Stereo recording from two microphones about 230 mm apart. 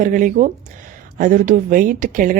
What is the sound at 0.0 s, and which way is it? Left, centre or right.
A woman's voice, right.